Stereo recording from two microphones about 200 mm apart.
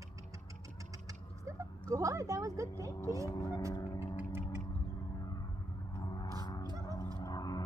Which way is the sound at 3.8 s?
20° left (ahead or behind).